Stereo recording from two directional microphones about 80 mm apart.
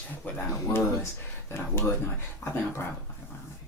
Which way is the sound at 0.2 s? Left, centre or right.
Left.